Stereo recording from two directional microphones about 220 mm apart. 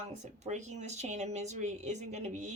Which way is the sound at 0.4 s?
30° right (ahead or behind).